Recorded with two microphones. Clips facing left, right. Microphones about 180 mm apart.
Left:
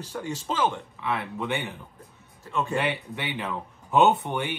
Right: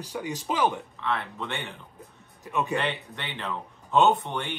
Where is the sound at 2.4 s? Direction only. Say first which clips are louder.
Right 1 dB; 15° right (ahead or behind).